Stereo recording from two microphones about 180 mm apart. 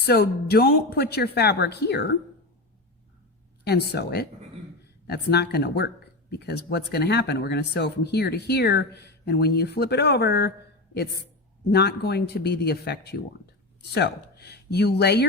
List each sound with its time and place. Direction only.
0.0 s speech: 60° left (ahead or behind)
3.6 s speech: 65° left (ahead or behind)